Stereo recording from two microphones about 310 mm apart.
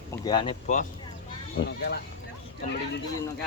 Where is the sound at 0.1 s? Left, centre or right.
Centre.